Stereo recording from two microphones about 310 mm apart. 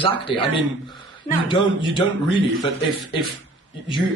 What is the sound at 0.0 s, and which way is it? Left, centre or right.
Speech, centre.